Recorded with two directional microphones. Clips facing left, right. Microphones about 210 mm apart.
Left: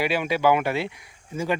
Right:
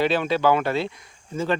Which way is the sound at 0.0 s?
10° left (ahead or behind).